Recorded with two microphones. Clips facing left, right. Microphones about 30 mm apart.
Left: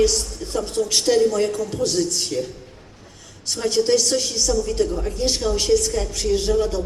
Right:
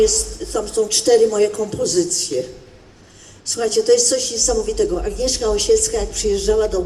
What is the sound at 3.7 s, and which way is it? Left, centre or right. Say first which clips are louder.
Speech: right 4 dB; left.